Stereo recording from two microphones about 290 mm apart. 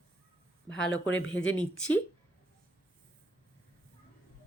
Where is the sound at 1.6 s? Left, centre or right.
Centre.